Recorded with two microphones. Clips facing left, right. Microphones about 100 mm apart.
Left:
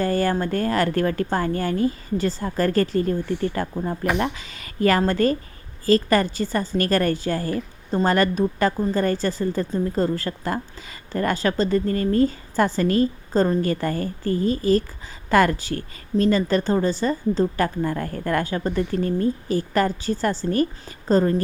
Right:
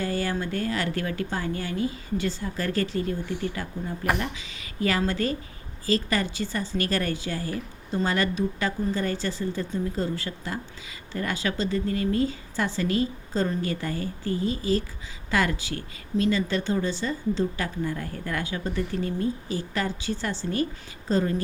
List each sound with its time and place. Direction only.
0.0 s a woman's voice: 50° left (ahead or behind)